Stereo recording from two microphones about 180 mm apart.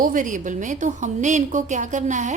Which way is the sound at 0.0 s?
45° right (ahead or behind).